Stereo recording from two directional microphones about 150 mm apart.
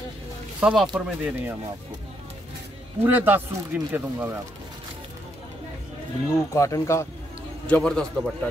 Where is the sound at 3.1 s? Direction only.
10° right (ahead or behind).